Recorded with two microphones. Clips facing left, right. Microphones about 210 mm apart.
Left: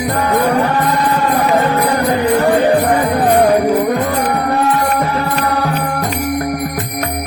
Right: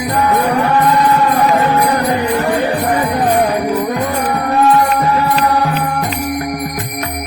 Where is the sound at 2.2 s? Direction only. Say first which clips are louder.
Left 3 dB; 35° left (ahead or behind).